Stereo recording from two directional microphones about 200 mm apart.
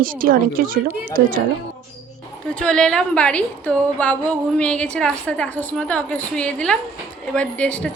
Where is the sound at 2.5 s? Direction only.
5° left (ahead or behind).